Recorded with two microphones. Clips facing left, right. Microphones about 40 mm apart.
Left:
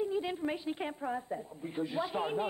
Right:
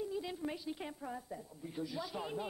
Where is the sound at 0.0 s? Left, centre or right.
Left.